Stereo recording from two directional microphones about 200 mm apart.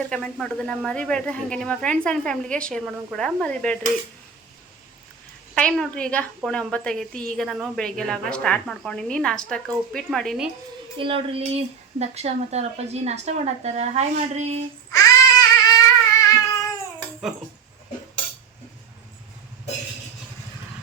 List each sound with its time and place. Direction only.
0.1 s a woman's voice: 5° left (ahead or behind)
5.5 s a woman's voice: 5° left (ahead or behind)
10.9 s a woman's voice: 25° right (ahead or behind)
14.9 s a sound: 15° left (ahead or behind)
16.2 s cat: 15° left (ahead or behind)